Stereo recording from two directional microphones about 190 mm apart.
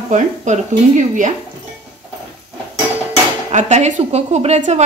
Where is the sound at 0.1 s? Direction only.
40° right (ahead or behind).